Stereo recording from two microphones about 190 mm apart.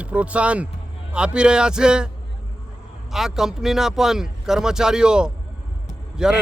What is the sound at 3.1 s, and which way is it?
Speech, centre (ahead or behind).